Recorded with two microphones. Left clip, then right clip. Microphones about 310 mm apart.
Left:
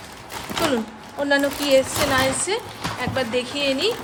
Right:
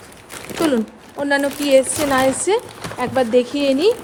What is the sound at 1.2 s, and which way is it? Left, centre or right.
Speech, right.